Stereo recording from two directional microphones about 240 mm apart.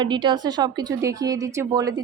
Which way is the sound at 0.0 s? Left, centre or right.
Centre.